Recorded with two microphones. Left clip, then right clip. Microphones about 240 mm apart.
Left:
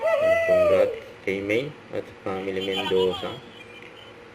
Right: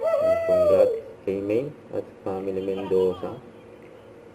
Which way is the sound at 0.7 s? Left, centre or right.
Left.